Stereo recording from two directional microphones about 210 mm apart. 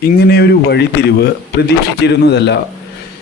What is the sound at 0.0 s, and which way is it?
Speech, 50° left (ahead or behind).